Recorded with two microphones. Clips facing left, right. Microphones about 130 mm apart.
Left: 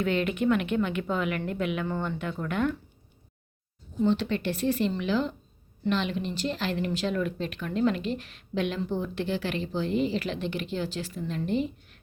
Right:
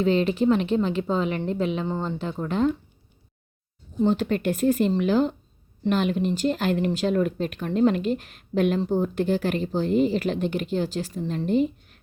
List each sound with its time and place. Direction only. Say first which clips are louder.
0.0 s speech: right 5 dB; 30° right (ahead or behind)
4.0 s speech: right 3 dB; 45° right (ahead or behind)